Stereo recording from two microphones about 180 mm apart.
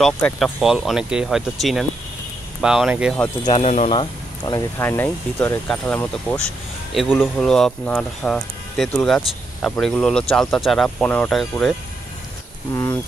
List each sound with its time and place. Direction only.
0.0 s speech: centre (ahead or behind)
3.4 s speech: 35° left (ahead or behind); by 11.7 s 5° left (ahead or behind)